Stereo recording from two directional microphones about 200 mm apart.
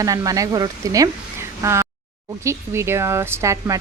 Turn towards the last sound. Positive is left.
turn(degrees=-15)  # may be behind; listen again after turning